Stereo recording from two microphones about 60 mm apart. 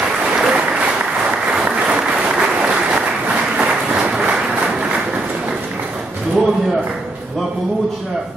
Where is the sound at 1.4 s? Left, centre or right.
Centre.